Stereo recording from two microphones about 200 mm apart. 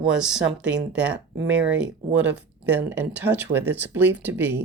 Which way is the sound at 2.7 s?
10° right (ahead or behind).